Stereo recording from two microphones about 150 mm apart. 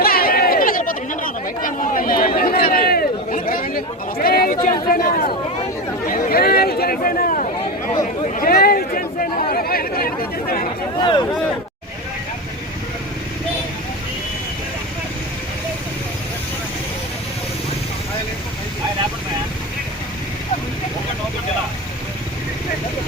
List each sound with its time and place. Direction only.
0.0 s chatter: 80° left
6.1 s chatter: 70° left (ahead or behind)
8.4 s chatter: 85° left
10.9 s speech: 30° left (ahead or behind)